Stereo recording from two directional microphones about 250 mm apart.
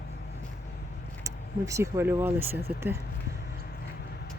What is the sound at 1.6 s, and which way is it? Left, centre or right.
Speech, centre.